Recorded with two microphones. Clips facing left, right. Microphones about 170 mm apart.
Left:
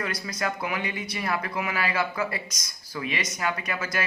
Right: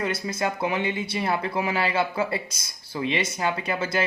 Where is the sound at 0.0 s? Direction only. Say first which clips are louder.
Right 4 dB; 25° right (ahead or behind).